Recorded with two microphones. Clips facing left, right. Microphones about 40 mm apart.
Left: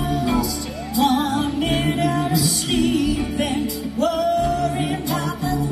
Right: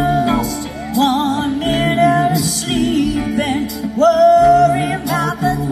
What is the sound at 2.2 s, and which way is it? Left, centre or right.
Music, centre.